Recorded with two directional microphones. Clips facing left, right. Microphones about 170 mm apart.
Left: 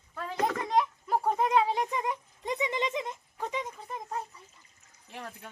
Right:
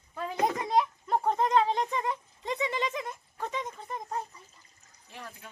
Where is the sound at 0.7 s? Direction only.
Centre (ahead or behind).